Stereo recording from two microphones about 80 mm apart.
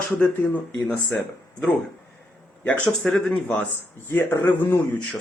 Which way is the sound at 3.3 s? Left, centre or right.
Centre.